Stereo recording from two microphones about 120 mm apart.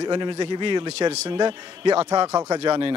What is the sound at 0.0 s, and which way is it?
Speech, 40° right (ahead or behind).